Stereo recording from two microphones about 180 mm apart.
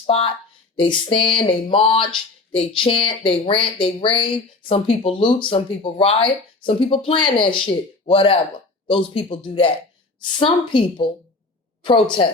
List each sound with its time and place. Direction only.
0.0 s speech: 30° left (ahead or behind)